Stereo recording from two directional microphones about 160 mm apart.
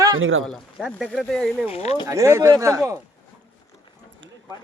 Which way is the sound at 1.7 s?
40° left (ahead or behind).